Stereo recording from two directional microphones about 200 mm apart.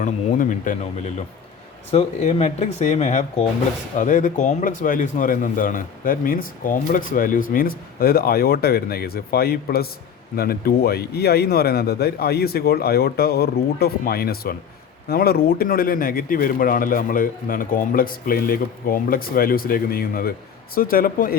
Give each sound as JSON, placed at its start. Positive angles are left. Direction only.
{"t": 0.0, "sound": "speech", "side_deg": 40}
{"t": 1.9, "sound": "speech", "side_deg": 30}